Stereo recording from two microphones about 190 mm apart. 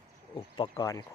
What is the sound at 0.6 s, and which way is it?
Speech, 20° left (ahead or behind).